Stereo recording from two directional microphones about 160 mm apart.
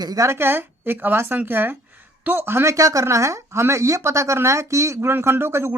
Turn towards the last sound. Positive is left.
turn(degrees=-15)  # may be behind; listen again after turning